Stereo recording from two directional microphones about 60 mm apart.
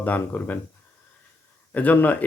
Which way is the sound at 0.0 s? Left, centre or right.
Left.